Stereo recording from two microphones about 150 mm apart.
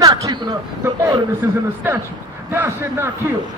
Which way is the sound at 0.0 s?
25° right (ahead or behind).